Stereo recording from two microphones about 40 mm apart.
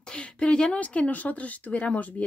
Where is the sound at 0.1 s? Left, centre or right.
Left.